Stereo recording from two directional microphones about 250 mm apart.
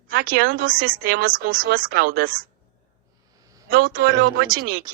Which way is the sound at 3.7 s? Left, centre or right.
Right.